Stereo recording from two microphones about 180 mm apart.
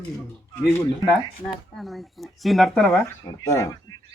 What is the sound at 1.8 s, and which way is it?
Speech, centre (ahead or behind).